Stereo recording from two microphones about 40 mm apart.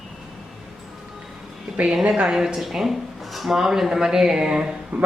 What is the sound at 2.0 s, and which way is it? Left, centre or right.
Speech, right.